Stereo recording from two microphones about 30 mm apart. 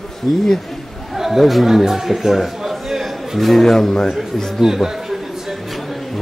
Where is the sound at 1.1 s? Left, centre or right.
Centre.